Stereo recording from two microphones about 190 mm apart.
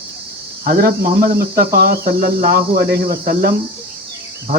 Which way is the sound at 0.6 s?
50° right (ahead or behind).